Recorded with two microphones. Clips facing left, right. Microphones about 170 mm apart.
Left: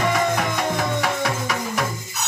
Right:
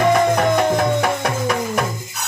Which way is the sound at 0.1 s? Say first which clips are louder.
Right 6 dB; 55° right (ahead or behind).